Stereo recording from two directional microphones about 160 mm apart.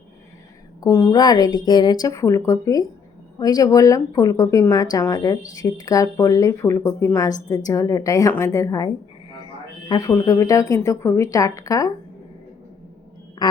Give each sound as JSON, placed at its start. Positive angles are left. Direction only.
{"t": 0.8, "sound": "speech", "side_deg": 20}
{"t": 9.9, "sound": "speech", "side_deg": 25}